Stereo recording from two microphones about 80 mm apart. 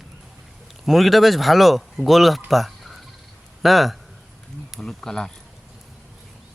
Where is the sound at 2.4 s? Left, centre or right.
Centre.